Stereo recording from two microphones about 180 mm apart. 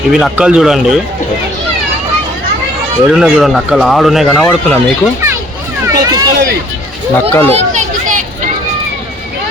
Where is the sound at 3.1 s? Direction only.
5° right (ahead or behind).